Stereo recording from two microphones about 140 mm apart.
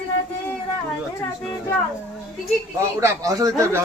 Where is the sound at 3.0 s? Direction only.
25° right (ahead or behind).